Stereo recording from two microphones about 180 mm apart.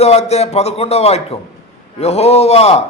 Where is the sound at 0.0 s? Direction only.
35° left (ahead or behind).